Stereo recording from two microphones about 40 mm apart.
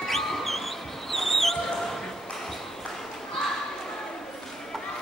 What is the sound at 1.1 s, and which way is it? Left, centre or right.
Basketball bounce, centre.